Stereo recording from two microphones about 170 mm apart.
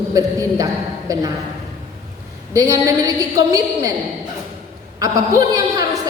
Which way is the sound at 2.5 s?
20° right (ahead or behind).